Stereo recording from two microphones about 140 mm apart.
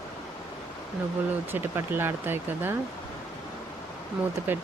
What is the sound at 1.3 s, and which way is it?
Speech, 15° right (ahead or behind).